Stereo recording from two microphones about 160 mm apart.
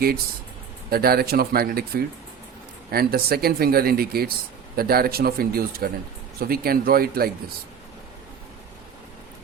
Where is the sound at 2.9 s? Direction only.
70° right (ahead or behind).